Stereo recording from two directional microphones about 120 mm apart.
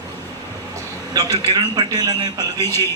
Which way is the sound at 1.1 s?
30° right (ahead or behind).